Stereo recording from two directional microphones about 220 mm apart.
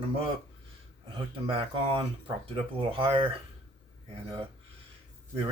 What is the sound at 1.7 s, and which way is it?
Speech, 20° right (ahead or behind).